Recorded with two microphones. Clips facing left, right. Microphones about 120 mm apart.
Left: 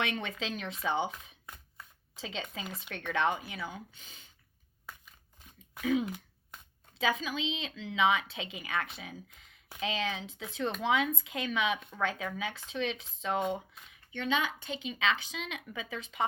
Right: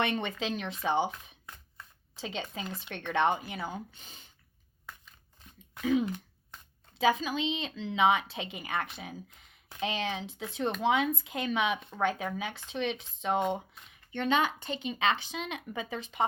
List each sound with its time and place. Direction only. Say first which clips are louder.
0.3 s speech: right 3 dB; 35° right (ahead or behind)
2.2 s speech: right 2 dB; 35° right (ahead or behind)
2.6 s speech: right 3 dB; centre (ahead or behind)
2.9 s speech: right 3 dB; 35° right (ahead or behind)
5.8 s speech: right 2 dB; 40° right (ahead or behind)
14.1 s speech: right 4 dB; 50° right (ahead or behind)